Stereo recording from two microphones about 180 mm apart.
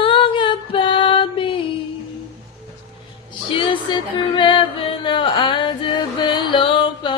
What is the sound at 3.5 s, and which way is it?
Music, 30° left (ahead or behind).